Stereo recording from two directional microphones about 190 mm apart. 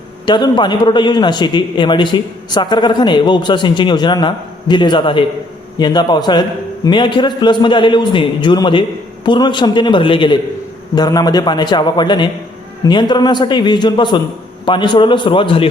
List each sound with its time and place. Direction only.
0.3 s a man's voice: 25° left (ahead or behind)